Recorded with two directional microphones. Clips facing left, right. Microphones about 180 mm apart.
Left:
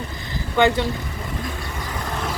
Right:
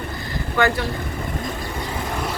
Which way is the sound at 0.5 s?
20° left (ahead or behind).